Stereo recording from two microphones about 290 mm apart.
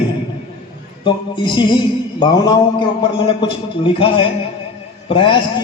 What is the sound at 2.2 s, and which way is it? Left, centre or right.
A man's voice, centre.